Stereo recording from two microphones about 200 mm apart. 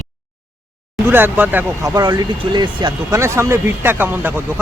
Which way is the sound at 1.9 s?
20° right (ahead or behind).